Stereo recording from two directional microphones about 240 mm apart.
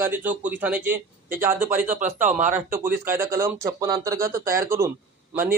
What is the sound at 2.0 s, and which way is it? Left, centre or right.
Speech, right.